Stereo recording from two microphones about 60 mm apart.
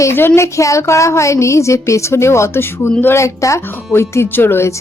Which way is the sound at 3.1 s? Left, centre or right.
Left.